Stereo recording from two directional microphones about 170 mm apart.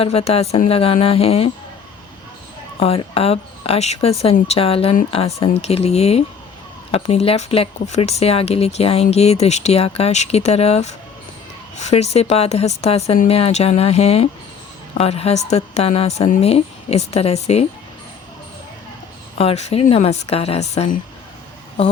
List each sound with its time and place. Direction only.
0.0 s speech: 35° left (ahead or behind)
2.7 s speech: 35° left (ahead or behind)
19.4 s speech: 35° left (ahead or behind)